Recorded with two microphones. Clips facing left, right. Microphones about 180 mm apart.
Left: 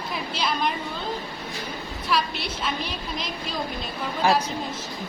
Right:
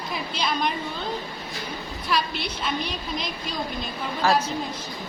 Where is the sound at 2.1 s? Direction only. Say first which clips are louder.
Even; centre (ahead or behind).